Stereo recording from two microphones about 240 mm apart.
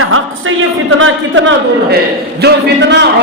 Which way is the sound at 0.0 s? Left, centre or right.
Right.